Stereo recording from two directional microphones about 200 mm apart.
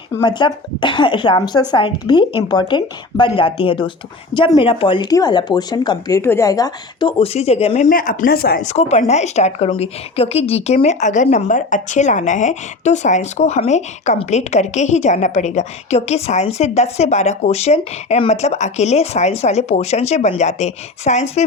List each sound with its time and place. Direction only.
0.2 s speech: 25° left (ahead or behind)
7.9 s speech: 45° left (ahead or behind)
8.6 s a woman's voice: 35° left (ahead or behind)